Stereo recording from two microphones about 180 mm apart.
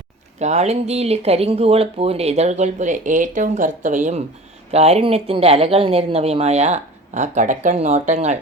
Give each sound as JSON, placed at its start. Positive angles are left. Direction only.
{"t": 0.3, "sound": "speech", "side_deg": -40}